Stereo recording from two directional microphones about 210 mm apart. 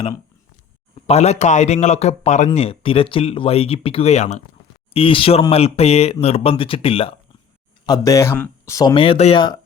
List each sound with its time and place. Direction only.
1.0 s speech: 30° left (ahead or behind)
7.9 s speech: 15° left (ahead or behind)
9.0 s speech: 30° left (ahead or behind)